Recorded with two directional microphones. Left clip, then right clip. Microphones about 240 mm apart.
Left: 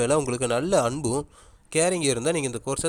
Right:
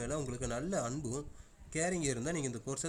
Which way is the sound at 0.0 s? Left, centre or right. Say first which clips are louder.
Left 16 dB; left.